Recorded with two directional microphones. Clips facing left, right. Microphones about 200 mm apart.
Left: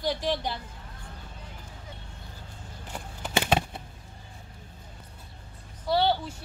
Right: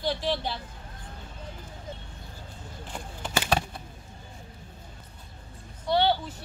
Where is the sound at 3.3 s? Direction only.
20° left (ahead or behind).